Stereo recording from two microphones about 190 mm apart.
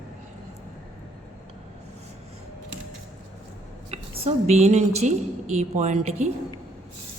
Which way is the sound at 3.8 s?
35° right (ahead or behind).